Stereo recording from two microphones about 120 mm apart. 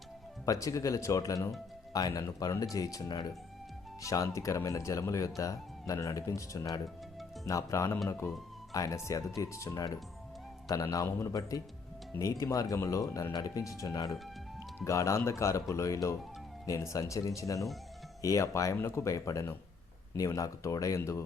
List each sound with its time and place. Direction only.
0.4 s speech: 25° left (ahead or behind)